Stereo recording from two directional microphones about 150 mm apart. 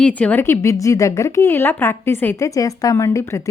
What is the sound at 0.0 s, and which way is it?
Speech, 10° left (ahead or behind).